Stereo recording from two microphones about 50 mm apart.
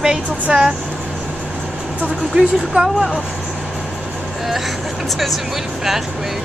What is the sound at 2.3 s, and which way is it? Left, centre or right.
Speech, centre.